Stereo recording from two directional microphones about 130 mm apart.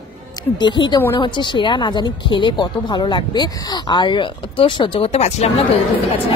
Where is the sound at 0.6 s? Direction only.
35° left (ahead or behind); by 5.5 s 50° left (ahead or behind).